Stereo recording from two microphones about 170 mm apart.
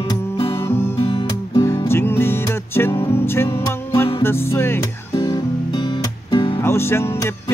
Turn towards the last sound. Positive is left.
turn(degrees=15)  # may be behind; listen again after turning